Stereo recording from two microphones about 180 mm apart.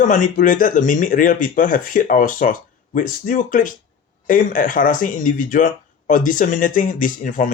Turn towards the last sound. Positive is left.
turn(degrees=45)  # may be behind; listen again after turning